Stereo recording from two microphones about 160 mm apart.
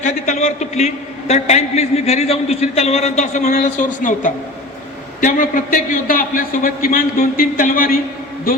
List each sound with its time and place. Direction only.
0.0 s a man's voice: 45° left (ahead or behind); by 7.9 s 60° left (ahead or behind)